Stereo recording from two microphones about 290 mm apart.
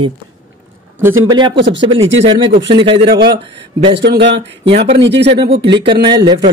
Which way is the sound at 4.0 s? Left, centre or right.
Right.